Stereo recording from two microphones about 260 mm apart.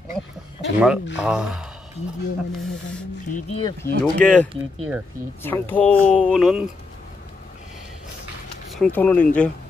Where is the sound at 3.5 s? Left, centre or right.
Left.